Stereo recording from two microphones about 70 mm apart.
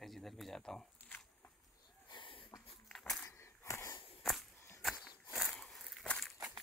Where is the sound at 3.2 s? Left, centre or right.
Left.